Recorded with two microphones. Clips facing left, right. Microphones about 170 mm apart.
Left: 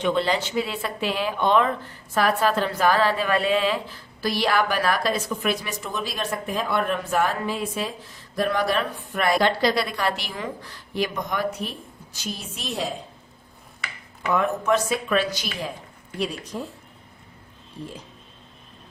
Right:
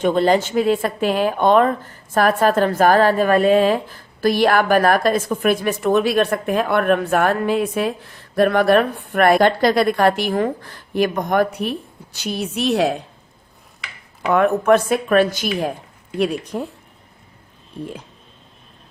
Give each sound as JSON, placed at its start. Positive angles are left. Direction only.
{"t": 0.0, "sound": "speech", "side_deg": -45}
{"t": 14.2, "sound": "speech", "side_deg": -65}
{"t": 17.8, "sound": "speech", "side_deg": -60}